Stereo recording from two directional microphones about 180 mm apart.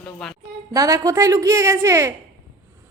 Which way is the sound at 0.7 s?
20° right (ahead or behind).